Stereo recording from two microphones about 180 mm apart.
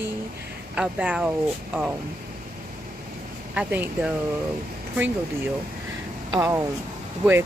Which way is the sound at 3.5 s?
10° right (ahead or behind).